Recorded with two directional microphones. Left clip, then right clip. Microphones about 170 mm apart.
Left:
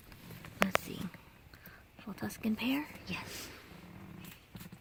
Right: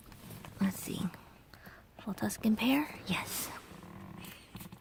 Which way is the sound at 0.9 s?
35° right (ahead or behind).